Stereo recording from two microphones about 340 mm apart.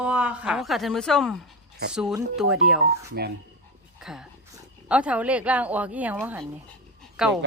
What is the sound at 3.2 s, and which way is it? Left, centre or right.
Speech, right.